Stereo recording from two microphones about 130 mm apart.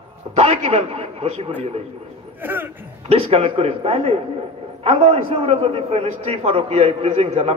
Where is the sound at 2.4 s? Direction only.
15° right (ahead or behind).